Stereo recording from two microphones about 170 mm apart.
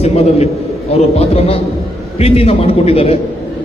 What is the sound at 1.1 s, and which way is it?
A man's voice, 35° left (ahead or behind).